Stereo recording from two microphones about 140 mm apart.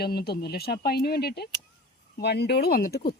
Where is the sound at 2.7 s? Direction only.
90° left.